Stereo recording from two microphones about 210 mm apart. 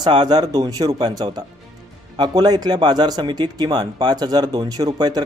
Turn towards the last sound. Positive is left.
turn(degrees=-20)  # may be behind; listen again after turning